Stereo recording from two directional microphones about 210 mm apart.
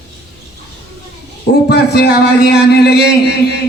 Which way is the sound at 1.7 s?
50° left (ahead or behind).